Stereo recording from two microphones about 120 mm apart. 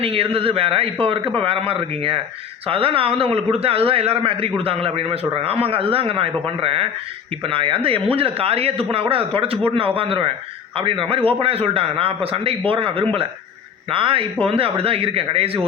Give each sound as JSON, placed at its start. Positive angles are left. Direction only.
{"t": 0.0, "sound": "speech", "side_deg": -50}